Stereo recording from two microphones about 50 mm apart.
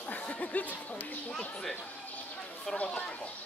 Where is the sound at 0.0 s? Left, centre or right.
Left.